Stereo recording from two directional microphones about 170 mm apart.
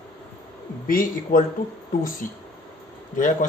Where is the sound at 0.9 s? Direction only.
55° left (ahead or behind).